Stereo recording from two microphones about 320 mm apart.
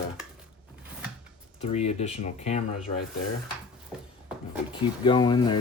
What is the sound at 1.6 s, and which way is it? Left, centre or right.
Speech, centre.